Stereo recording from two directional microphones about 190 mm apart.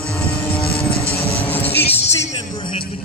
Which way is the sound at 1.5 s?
10° left (ahead or behind).